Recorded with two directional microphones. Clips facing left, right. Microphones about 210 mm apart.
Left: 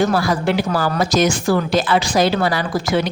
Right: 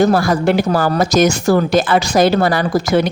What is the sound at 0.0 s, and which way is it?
Speech, 45° right (ahead or behind).